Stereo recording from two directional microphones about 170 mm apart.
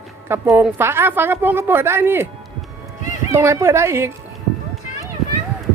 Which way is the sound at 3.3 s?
15° right (ahead or behind).